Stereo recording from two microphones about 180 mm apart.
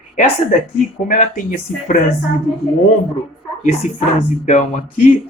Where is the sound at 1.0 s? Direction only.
45° left (ahead or behind).